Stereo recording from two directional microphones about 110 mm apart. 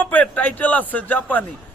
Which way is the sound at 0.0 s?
15° left (ahead or behind).